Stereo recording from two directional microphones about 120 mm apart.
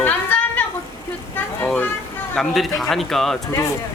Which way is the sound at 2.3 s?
Centre (ahead or behind).